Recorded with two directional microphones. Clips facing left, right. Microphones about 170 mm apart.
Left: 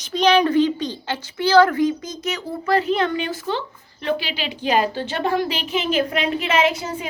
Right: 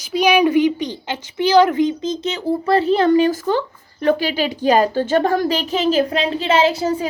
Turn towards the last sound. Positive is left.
turn(degrees=-35)  # may be behind; listen again after turning